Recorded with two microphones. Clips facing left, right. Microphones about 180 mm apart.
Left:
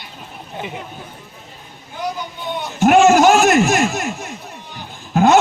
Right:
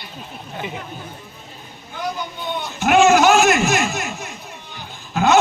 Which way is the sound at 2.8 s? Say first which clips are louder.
Left 3 dB; 45° left (ahead or behind).